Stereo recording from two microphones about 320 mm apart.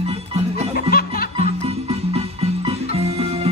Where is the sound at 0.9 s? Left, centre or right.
Left.